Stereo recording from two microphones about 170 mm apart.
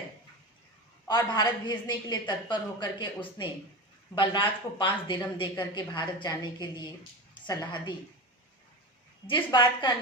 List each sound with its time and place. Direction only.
1.0 s a woman's voice: 25° left (ahead or behind)
9.2 s a woman's voice: 30° left (ahead or behind)